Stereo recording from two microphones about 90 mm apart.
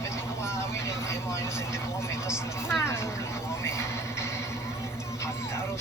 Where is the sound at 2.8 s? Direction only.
30° left (ahead or behind).